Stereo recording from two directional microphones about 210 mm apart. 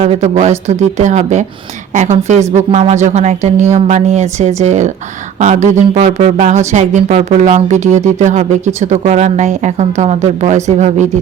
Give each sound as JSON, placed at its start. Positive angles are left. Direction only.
{"t": 0.0, "sound": "speech", "side_deg": -30}